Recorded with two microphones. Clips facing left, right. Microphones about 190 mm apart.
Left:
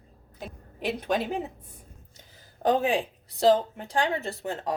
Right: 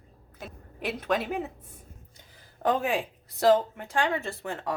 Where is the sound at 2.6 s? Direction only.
35° left (ahead or behind).